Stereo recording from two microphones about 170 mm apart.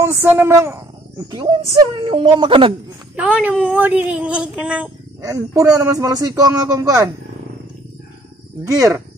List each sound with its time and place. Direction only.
0.0 s speech: 15° right (ahead or behind)
3.2 s speech: 5° right (ahead or behind)
5.2 s speech: 20° right (ahead or behind)
8.6 s speech: 20° right (ahead or behind)